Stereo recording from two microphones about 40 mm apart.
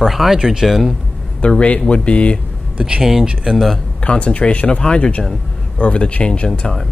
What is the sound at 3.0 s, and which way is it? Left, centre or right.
Speech, centre.